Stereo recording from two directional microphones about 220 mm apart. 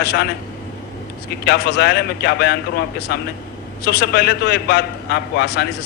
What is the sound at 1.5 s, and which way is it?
A man's voice, 45° left (ahead or behind).